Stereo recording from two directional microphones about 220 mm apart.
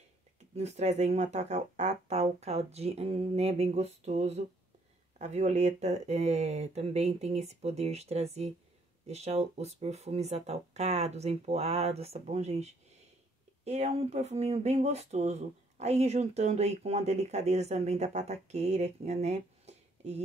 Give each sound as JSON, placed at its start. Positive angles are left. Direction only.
{"t": 0.4, "sound": "speech", "side_deg": -30}